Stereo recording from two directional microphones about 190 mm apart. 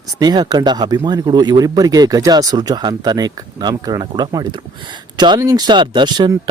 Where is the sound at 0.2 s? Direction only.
20° right (ahead or behind).